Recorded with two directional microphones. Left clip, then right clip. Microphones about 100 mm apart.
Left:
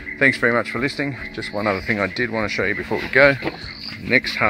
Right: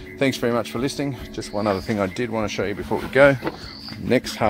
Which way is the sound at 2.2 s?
10° right (ahead or behind).